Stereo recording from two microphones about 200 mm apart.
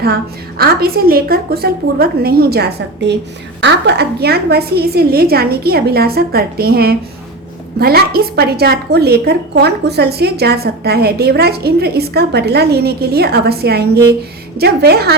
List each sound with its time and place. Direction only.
0.6 s a woman's voice: 50° right (ahead or behind)